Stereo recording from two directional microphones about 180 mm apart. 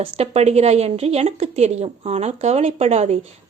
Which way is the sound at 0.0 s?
35° right (ahead or behind).